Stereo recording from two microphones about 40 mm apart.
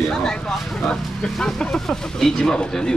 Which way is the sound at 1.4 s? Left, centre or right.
Centre.